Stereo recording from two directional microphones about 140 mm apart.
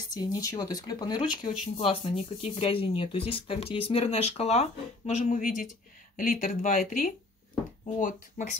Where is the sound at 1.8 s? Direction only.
45° left (ahead or behind); by 8.5 s 70° left (ahead or behind).